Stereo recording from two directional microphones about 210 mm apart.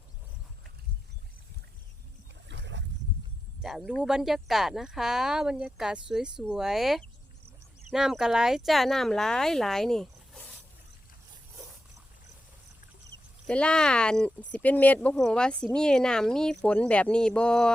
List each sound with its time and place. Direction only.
2.5 s boat: 60° right (ahead or behind)
3.6 s speech: centre (ahead or behind)
13.5 s speech: 5° left (ahead or behind)